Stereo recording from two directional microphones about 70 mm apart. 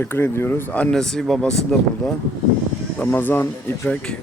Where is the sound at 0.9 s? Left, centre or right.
Centre.